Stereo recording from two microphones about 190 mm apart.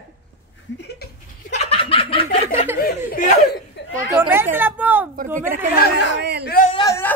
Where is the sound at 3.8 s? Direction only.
65° left (ahead or behind).